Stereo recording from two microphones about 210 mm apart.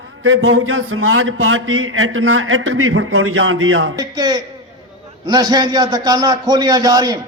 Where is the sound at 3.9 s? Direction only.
20° right (ahead or behind).